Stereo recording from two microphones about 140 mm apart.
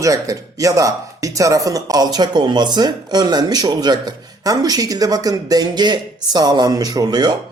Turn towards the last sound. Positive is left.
turn(degrees=-30)  # may be behind; listen again after turning